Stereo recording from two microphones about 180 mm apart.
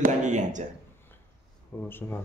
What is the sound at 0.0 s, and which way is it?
Speech, 40° right (ahead or behind).